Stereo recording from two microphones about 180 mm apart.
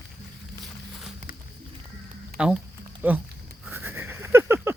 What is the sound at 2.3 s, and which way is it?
Speech, 60° right (ahead or behind).